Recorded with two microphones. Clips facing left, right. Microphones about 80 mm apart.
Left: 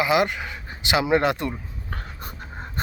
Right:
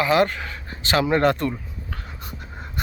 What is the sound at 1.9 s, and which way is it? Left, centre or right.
Writing, left.